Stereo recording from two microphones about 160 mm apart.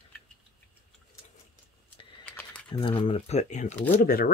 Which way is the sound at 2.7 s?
30° left (ahead or behind).